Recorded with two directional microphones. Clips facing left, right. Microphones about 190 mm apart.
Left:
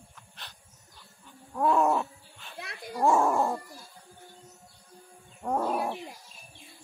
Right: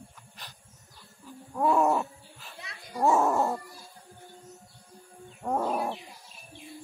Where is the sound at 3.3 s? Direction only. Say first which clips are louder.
Even; centre (ahead or behind).